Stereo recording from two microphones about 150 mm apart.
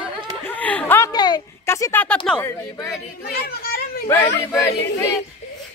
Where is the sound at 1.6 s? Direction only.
15° left (ahead or behind).